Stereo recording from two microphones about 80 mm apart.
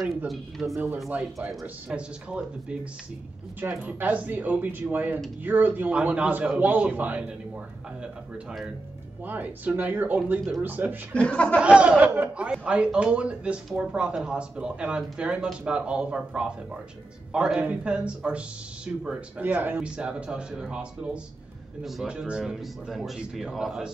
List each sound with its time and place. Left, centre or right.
0.3 s speech: centre
1.1 s a man's voice: centre
1.5 s speech: centre
2.0 s speech: centre
3.6 s a man's voice: right
9.2 s a man's voice: right
11.1 s speech: centre
11.6 s speech: centre